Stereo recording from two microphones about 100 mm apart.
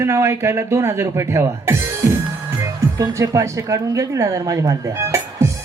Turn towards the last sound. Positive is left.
turn(degrees=-30)  # may be behind; listen again after turning